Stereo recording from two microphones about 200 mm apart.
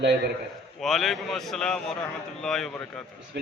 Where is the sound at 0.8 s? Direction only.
Centre (ahead or behind).